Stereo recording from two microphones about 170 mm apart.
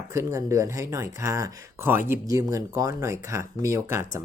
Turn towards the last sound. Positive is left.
turn(degrees=-15)  # may be behind; listen again after turning